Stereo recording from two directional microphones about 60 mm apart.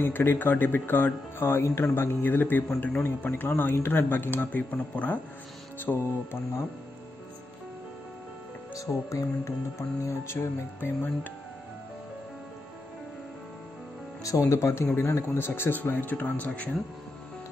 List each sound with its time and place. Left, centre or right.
0.0 s speech: left
4.5 s speech: left
8.7 s speech: left
14.2 s speech: left
15.2 s speech: left